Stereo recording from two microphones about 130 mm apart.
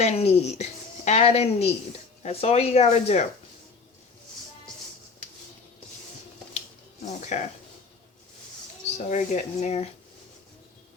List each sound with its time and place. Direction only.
0.0 s a woman's voice: 55° left (ahead or behind)
7.3 s speech: 65° left (ahead or behind)
9.0 s speech: 65° left (ahead or behind)